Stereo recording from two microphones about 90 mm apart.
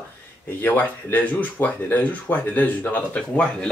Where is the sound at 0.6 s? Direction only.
20° left (ahead or behind).